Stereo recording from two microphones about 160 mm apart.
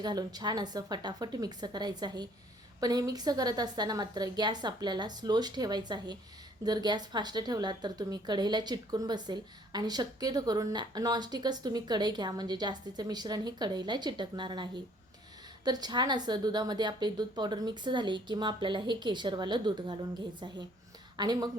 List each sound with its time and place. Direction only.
0.0 s a woman's voice: 25° right (ahead or behind)